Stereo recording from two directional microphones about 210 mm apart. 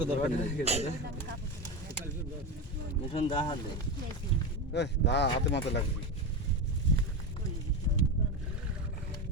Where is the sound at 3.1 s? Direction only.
25° left (ahead or behind).